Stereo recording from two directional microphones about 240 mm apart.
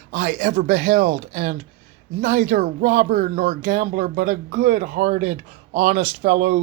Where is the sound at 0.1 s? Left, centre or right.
Right.